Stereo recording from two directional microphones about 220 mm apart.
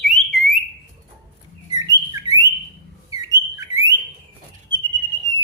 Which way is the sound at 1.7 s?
15° right (ahead or behind).